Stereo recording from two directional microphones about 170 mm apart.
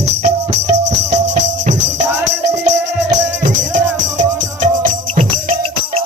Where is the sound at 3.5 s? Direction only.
45° right (ahead or behind).